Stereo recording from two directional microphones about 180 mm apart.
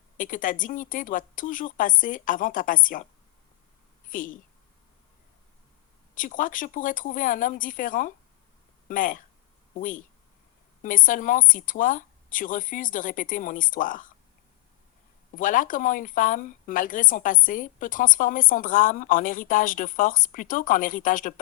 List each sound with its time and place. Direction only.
0.2 s speech: 50° left (ahead or behind)
4.1 s speech: 50° left (ahead or behind)
6.1 s speech: 50° left (ahead or behind)
15.4 s speech: 45° left (ahead or behind)